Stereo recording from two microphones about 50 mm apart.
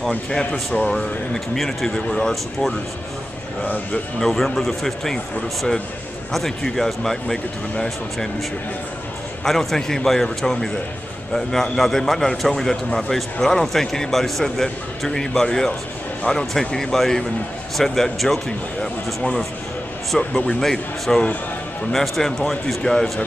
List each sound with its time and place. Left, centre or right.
0.3 s a man's voice: centre
4.2 s a man's voice: centre
9.4 s a man's voice: centre
20.2 s a man's voice: centre